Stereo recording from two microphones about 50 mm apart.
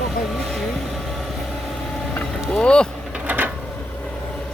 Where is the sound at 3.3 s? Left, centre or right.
Right.